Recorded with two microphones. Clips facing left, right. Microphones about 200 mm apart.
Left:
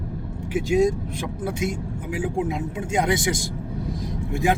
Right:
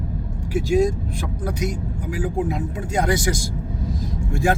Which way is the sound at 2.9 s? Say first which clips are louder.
Right 1 dB; 20° left (ahead or behind).